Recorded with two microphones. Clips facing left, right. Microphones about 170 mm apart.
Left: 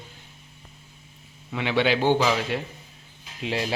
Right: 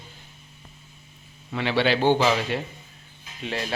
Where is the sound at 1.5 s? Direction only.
10° left (ahead or behind).